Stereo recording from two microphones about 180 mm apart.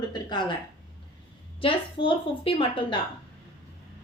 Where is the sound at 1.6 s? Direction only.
30° left (ahead or behind).